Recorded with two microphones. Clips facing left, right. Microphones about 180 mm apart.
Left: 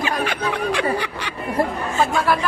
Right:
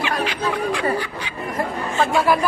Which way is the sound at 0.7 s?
75° left (ahead or behind).